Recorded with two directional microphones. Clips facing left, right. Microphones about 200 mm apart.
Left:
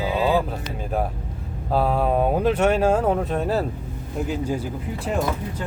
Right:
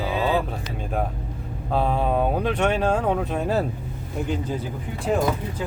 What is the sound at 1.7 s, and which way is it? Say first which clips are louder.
Speech: left 2 dB; 5° left (ahead or behind).